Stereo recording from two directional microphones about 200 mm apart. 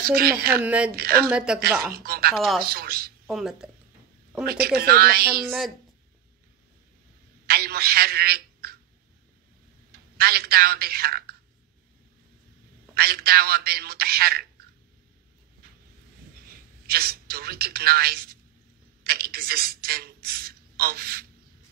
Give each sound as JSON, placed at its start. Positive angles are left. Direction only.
{"t": 0.0, "sound": "a man's voice", "side_deg": -50}
{"t": 0.6, "sound": "speech", "side_deg": -5}
{"t": 0.9, "sound": "a man's voice", "side_deg": -50}
{"t": 1.3, "sound": "speech", "side_deg": -5}
{"t": 2.0, "sound": "a man's voice", "side_deg": -50}
{"t": 2.3, "sound": "speech", "side_deg": 0}
{"t": 2.6, "sound": "a man's voice", "side_deg": -50}
{"t": 3.3, "sound": "speech", "side_deg": 0}
{"t": 4.7, "sound": "a man's voice", "side_deg": -50}
{"t": 7.4, "sound": "a man's voice", "side_deg": -50}
{"t": 10.1, "sound": "a man's voice", "side_deg": -50}
{"t": 12.9, "sound": "a man's voice", "side_deg": -50}
{"t": 16.4, "sound": "a woman's voice", "side_deg": -50}